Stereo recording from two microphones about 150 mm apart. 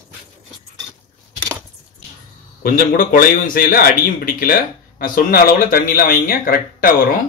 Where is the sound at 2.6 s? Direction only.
75° left (ahead or behind).